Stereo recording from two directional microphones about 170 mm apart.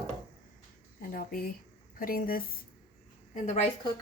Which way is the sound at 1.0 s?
60° left (ahead or behind).